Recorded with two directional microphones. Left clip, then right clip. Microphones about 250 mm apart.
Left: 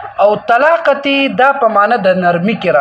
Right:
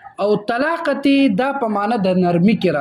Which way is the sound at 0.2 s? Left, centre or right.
Right.